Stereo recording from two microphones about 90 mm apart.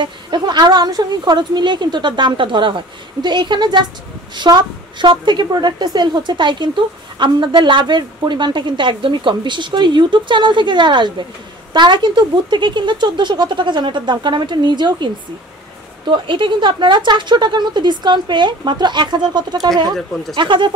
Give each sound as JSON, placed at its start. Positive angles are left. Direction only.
{"t": 0.0, "sound": "a woman's voice", "side_deg": -55}
{"t": 16.1, "sound": "a woman's voice", "side_deg": -65}
{"t": 20.3, "sound": "a woman's voice", "side_deg": -65}